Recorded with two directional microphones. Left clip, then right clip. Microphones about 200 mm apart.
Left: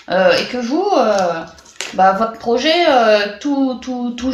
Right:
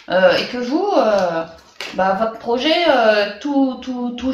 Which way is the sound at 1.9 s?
40° left (ahead or behind).